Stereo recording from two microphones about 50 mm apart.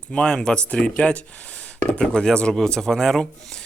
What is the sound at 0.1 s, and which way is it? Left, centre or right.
Speech, centre.